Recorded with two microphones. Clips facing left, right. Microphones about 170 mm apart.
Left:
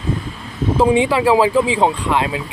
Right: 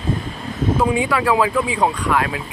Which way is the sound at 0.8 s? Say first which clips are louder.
Left 7 dB; 25° left (ahead or behind).